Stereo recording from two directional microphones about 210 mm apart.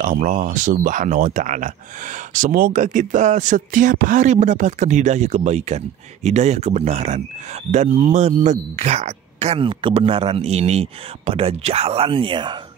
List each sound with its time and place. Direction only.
0.0 s speech: 35° right (ahead or behind)